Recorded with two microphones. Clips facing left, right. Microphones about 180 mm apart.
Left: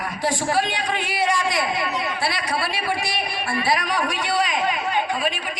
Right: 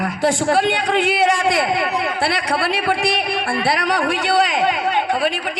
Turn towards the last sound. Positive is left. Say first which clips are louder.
# right 5 dB
turn(degrees=-70)  # may be behind; listen again after turning